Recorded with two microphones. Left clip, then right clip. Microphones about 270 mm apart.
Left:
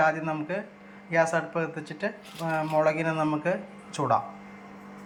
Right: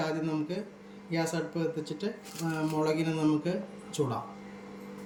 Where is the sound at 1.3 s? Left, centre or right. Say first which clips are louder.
Left 5 dB; centre.